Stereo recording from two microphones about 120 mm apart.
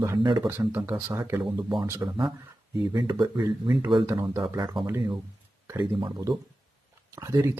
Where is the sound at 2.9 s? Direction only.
40° right (ahead or behind).